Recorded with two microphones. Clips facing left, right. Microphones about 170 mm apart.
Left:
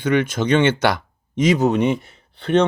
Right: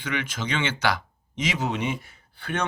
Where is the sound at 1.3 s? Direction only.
40° left (ahead or behind).